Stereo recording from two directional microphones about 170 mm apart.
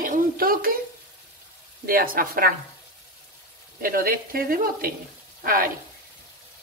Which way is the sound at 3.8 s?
55° right (ahead or behind).